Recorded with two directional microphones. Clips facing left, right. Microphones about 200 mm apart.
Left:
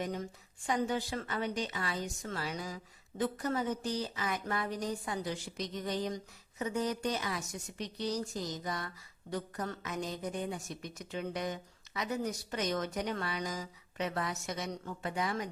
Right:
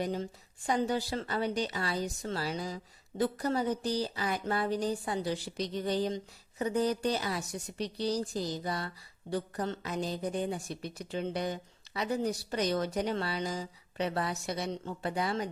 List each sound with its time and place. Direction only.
0.0 s a woman's voice: 30° right (ahead or behind)